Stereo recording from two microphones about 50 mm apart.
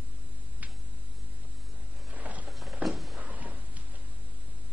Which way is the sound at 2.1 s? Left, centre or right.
Right.